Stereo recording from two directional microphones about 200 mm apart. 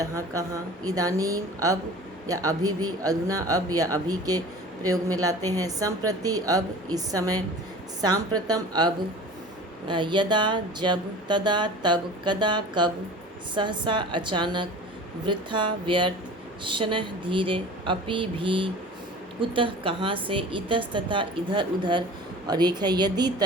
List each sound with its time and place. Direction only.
0.0 s speech: 15° right (ahead or behind)